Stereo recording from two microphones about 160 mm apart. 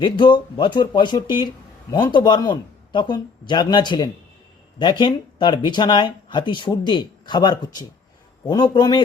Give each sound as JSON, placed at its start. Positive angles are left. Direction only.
{"t": 0.0, "sound": "speech", "side_deg": 30}